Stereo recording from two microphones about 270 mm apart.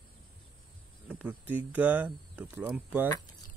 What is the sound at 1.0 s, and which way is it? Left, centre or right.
Speech, centre.